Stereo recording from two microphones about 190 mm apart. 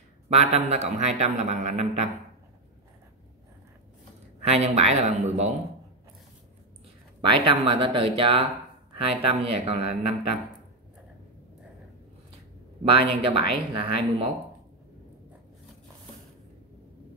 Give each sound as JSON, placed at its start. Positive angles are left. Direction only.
{"t": 0.3, "sound": "a man's voice", "side_deg": -35}
{"t": 4.4, "sound": "a man's voice", "side_deg": -35}
{"t": 7.2, "sound": "a man's voice", "side_deg": -25}
{"t": 12.8, "sound": "speech", "side_deg": -30}